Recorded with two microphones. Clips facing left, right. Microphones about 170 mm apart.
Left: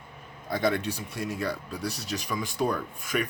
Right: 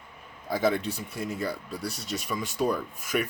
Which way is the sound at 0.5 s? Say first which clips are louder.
Right 1 dB; 5° right (ahead or behind).